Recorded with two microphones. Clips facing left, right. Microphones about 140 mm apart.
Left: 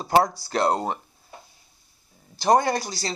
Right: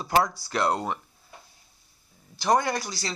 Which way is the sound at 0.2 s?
35° left (ahead or behind).